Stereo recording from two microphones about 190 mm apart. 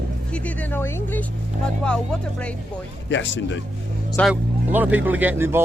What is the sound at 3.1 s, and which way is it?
Speech, 75° left (ahead or behind).